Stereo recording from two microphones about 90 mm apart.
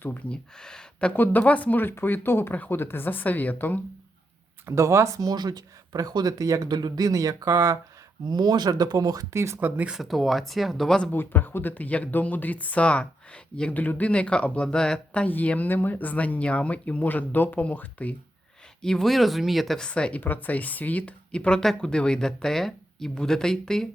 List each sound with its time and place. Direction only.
0.0 s speech: 20° left (ahead or behind)
0.6 s speech: 10° left (ahead or behind)
4.6 s speech: 35° right (ahead or behind)
8.3 s speech: 50° right (ahead or behind); by 9.6 s 30° right (ahead or behind)
9.6 s speech: 20° right (ahead or behind)
9.9 s speech: centre (ahead or behind)
11.1 s speech: 20° left (ahead or behind)
18.8 s speech: 5° left (ahead or behind)
19.9 s speech: 15° left (ahead or behind)